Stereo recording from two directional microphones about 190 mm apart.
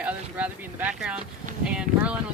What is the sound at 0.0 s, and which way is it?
Speech, 10° right (ahead or behind).